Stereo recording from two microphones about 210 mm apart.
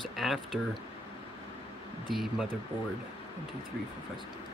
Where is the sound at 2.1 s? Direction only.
Centre (ahead or behind).